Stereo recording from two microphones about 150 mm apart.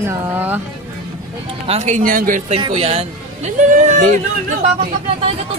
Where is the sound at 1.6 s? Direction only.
50° right (ahead or behind); by 2.4 s 70° right (ahead or behind).